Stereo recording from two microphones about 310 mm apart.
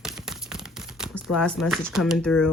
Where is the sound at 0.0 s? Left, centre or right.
Centre.